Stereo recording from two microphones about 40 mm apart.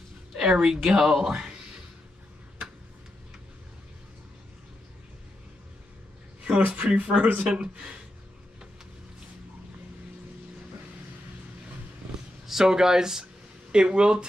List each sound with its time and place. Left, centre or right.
0.3 s speech: centre
6.4 s speech: right
12.4 s speech: centre